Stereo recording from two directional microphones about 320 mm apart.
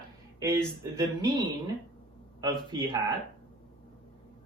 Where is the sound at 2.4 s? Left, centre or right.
Centre.